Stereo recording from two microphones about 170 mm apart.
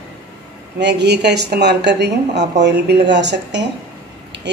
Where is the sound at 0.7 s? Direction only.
85° right.